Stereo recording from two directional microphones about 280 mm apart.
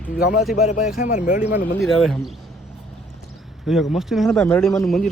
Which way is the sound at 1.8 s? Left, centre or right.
Centre.